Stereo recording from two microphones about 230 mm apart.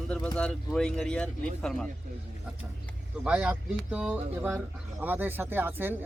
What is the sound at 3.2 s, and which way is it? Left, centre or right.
Speech, centre.